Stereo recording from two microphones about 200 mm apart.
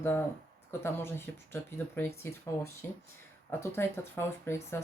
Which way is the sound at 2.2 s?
10° left (ahead or behind).